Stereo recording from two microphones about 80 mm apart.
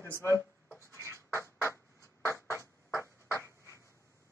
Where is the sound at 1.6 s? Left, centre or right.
Left.